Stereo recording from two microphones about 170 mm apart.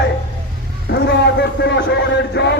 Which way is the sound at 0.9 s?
80° left.